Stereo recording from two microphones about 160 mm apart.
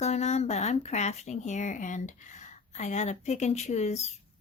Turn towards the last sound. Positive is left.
turn(degrees=45)  # may be behind; listen again after turning